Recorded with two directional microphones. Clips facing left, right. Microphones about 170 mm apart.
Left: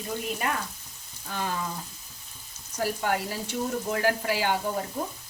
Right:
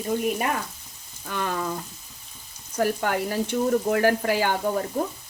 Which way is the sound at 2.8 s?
60° right (ahead or behind).